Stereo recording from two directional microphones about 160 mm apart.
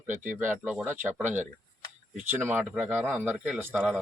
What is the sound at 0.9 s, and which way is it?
Speech, 50° right (ahead or behind).